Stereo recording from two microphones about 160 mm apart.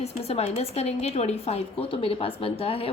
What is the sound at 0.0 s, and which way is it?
Speech, 40° left (ahead or behind).